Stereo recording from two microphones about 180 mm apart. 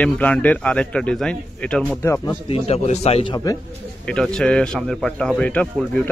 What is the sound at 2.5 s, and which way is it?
Speech, 35° left (ahead or behind).